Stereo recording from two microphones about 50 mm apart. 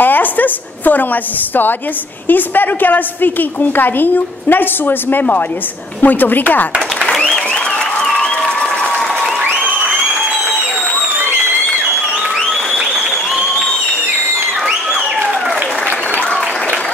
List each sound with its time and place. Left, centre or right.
0.0 s a woman's voice: left